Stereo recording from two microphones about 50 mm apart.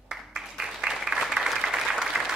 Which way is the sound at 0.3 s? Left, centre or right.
Centre.